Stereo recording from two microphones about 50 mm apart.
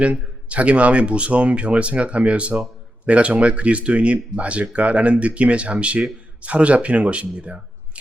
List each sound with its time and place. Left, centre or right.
0.0 s speech: right